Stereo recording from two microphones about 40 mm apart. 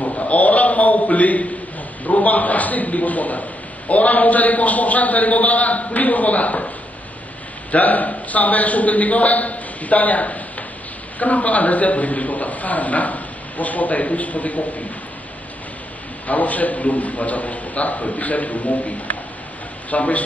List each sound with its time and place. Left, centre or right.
0.0 s a sound: left
2.0 s a man's voice: left
7.7 s a man's voice: left
16.3 s a man's voice: left